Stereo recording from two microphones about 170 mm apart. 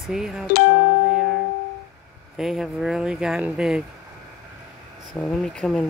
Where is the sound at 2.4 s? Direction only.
Centre (ahead or behind).